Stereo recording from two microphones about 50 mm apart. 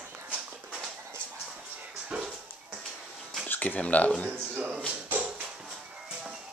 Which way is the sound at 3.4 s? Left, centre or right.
Left.